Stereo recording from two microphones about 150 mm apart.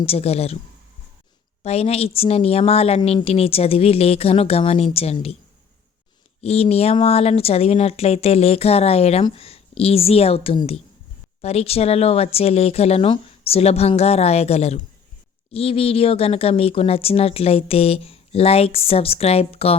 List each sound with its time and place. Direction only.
0.0 s speech: 40° left (ahead or behind)
1.6 s speech: 45° left (ahead or behind)
6.4 s speech: 45° left (ahead or behind)